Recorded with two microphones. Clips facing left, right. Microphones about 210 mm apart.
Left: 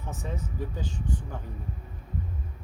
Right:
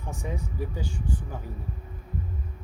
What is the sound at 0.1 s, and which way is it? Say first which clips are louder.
Speech: right 2 dB; 10° right (ahead or behind).